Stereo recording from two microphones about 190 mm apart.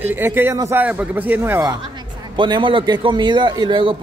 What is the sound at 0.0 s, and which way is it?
A man's voice, 10° right (ahead or behind).